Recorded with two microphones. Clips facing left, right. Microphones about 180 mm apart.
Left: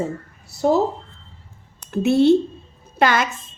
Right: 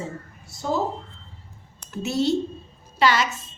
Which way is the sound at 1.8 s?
60° left (ahead or behind).